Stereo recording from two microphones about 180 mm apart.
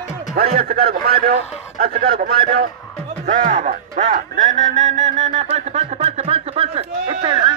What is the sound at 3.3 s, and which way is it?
Speech, 45° right (ahead or behind).